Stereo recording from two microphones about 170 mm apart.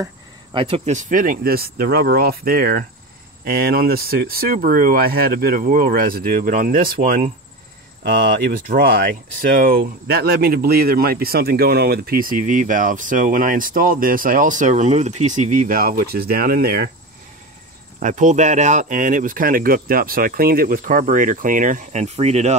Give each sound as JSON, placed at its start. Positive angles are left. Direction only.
{"t": 0.0, "sound": "speech", "side_deg": -30}
{"t": 10.0, "sound": "speech", "side_deg": -65}
{"t": 18.0, "sound": "speech", "side_deg": -45}